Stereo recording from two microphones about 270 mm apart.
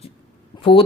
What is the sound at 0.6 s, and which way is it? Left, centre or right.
Speech, centre.